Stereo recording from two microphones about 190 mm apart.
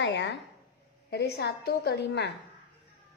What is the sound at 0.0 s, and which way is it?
A woman's voice, 65° left (ahead or behind).